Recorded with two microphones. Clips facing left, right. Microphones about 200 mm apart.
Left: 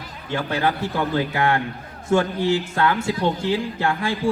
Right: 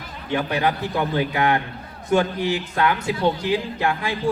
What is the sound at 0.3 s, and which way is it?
A man's voice, 20° right (ahead or behind).